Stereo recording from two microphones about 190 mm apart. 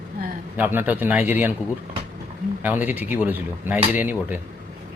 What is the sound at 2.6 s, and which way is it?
Speech, 10° right (ahead or behind).